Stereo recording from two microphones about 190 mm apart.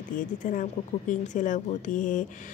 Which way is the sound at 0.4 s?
40° left (ahead or behind).